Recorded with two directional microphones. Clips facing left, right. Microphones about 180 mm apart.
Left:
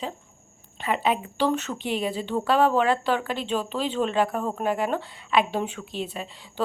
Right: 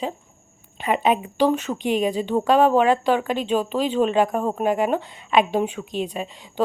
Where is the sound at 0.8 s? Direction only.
20° right (ahead or behind).